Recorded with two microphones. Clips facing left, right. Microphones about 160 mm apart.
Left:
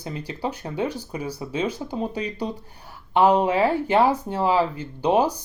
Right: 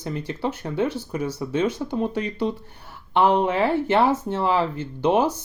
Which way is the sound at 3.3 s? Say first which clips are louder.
Left 1 dB; 15° left (ahead or behind).